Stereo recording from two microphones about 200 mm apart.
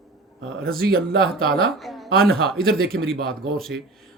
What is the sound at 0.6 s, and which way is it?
Speech, 50° right (ahead or behind).